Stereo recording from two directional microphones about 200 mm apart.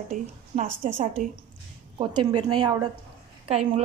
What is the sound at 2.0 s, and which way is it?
Speech, 25° right (ahead or behind).